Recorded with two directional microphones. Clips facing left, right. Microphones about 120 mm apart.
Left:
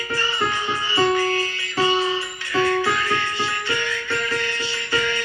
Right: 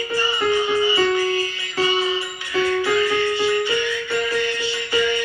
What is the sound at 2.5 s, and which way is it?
Music, 30° left (ahead or behind).